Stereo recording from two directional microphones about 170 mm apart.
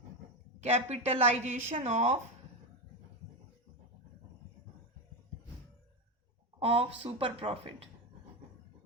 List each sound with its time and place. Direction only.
0.6 s a woman's voice: 40° right (ahead or behind)
6.6 s a woman's voice: 35° right (ahead or behind)